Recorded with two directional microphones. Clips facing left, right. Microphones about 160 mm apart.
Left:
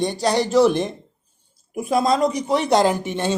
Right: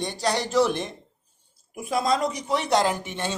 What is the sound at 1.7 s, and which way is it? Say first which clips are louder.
Speech: left 5 dB; 40° left (ahead or behind).